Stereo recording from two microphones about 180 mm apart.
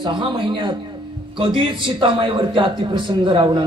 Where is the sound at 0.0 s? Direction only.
25° right (ahead or behind).